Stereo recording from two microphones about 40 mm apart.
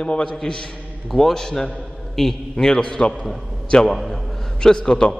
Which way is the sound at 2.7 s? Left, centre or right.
Centre.